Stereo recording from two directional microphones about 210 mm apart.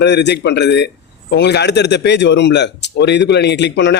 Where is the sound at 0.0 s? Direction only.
55° left (ahead or behind).